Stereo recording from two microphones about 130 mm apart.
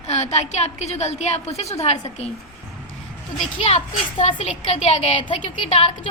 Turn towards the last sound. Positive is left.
turn(degrees=50)  # may be behind; listen again after turning